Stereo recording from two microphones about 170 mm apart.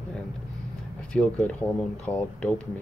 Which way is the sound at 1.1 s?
5° left (ahead or behind).